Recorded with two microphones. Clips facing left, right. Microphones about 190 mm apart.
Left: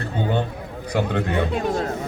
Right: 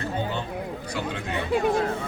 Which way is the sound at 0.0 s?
55° left (ahead or behind).